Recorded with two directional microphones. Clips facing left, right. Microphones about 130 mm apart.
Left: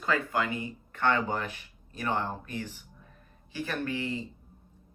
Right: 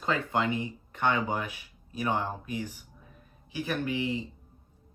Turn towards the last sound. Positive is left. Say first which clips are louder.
# right 2 dB
turn(degrees=-15)  # may be behind; listen again after turning